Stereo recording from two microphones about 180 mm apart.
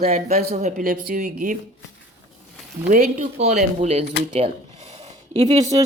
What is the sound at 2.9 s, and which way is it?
Speech, 40° right (ahead or behind).